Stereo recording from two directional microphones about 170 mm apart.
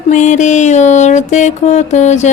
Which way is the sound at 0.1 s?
45° left (ahead or behind).